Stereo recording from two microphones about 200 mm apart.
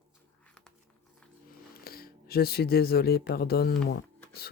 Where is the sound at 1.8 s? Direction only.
50° left (ahead or behind).